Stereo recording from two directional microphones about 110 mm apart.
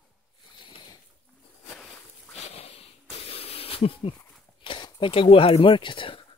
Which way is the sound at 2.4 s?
65° left (ahead or behind).